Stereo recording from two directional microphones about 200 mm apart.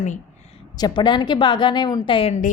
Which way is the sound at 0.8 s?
20° left (ahead or behind).